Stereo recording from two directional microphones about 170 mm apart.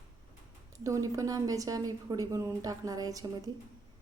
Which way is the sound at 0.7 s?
20° right (ahead or behind).